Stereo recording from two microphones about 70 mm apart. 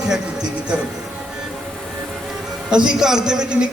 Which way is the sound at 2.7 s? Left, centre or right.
Centre.